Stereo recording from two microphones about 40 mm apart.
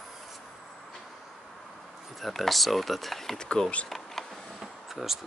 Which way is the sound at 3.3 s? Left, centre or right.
Centre.